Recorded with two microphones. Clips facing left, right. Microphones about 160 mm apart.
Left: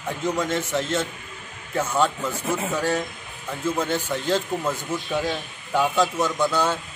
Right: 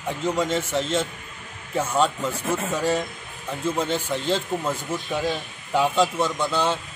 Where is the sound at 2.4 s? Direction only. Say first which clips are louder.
Left 1 dB; 10° left (ahead or behind).